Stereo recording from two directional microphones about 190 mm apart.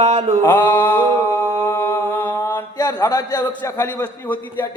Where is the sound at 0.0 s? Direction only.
35° right (ahead or behind).